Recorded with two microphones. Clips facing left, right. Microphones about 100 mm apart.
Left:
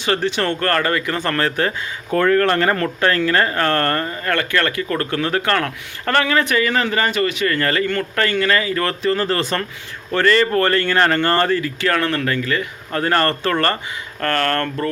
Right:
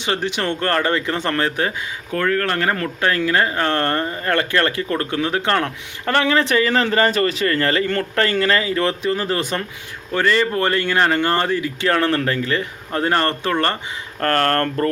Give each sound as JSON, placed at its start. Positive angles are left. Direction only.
{"t": 0.0, "sound": "speech", "side_deg": -15}
{"t": 2.1, "sound": "speech", "side_deg": 5}
{"t": 14.2, "sound": "speech", "side_deg": -35}